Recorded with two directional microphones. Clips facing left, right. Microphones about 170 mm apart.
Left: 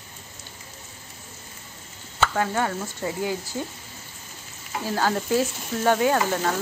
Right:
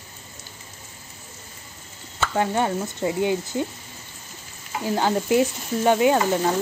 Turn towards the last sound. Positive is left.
turn(degrees=-15)  # may be behind; listen again after turning